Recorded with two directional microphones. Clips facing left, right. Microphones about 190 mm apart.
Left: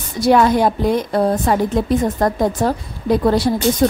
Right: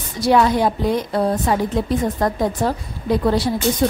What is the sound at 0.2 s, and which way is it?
Speech, 50° left (ahead or behind).